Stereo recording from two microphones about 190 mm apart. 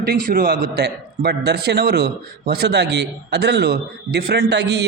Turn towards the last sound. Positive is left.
turn(degrees=-65)  # may be behind; listen again after turning